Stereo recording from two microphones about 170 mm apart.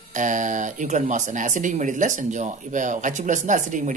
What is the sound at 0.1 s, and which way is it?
Speech, 50° right (ahead or behind).